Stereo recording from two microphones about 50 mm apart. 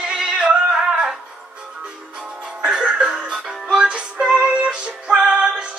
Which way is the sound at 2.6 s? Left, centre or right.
Centre.